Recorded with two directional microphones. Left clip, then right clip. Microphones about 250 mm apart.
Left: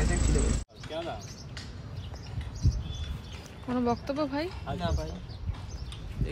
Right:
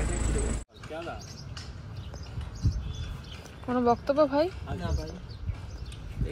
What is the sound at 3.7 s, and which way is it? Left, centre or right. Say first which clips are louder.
Speech: right 5 dB; centre.